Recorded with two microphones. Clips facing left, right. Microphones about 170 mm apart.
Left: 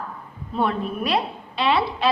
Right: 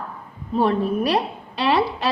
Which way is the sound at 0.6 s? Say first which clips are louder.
Right 4 dB; 40° right (ahead or behind).